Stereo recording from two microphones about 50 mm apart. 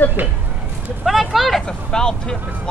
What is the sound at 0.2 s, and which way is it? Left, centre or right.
Speech, right.